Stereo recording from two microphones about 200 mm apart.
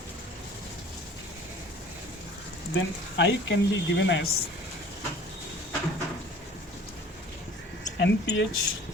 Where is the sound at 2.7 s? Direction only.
65° left (ahead or behind).